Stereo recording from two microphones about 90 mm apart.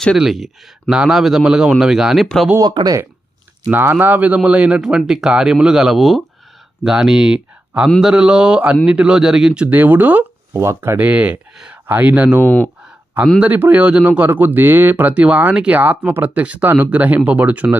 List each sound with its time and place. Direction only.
0.2 s a man's voice: centre (ahead or behind)
2.6 s speech: 50° right (ahead or behind)
3.7 s speech: 20° right (ahead or behind); by 9.6 s 5° right (ahead or behind)
9.6 s speech: 20° right (ahead or behind)
10.6 s speech: 30° right (ahead or behind)
10.9 s speech: 20° right (ahead or behind)
11.5 s a sound: 10° right (ahead or behind)
11.9 s speech: 20° right (ahead or behind)
13.4 s speech: 20° right (ahead or behind)